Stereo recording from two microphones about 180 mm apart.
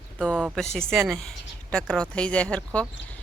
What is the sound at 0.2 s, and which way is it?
Speech, 5° left (ahead or behind).